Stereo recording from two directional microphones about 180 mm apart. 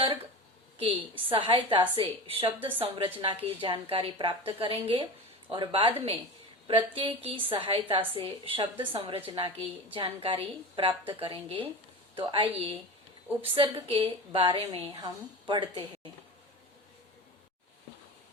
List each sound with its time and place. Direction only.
0.8 s a woman's voice: 30° right (ahead or behind)